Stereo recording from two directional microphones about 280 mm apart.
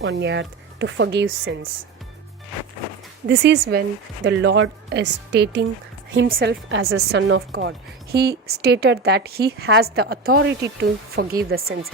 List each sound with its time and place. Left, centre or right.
0.0 s speech: right
3.2 s speech: right